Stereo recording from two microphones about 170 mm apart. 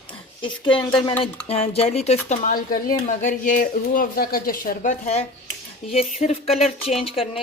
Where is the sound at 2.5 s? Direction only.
55° left (ahead or behind).